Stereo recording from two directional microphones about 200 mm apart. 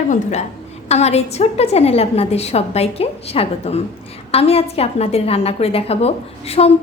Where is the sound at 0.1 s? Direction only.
35° left (ahead or behind).